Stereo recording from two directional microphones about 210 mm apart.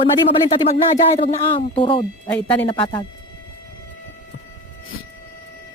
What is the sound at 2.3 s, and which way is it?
Speech, 10° left (ahead or behind).